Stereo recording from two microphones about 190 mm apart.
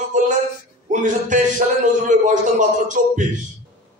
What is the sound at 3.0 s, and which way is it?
Speech, 40° right (ahead or behind).